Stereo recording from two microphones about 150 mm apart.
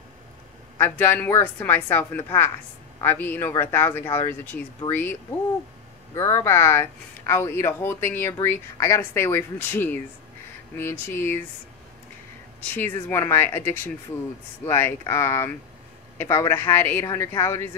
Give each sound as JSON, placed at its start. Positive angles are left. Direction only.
{"t": 0.7, "sound": "speech", "side_deg": 15}
{"t": 6.1, "sound": "speech", "side_deg": 15}
{"t": 12.5, "sound": "speech", "side_deg": 10}